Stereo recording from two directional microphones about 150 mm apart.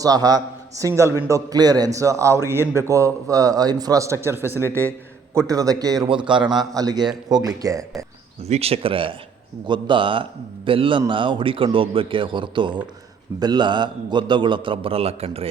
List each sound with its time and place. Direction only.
0.0 s a man's voice: 25° right (ahead or behind)
8.4 s a man's voice: 45° right (ahead or behind)